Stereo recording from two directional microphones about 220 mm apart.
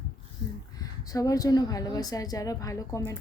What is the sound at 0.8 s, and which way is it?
Speech, 15° left (ahead or behind).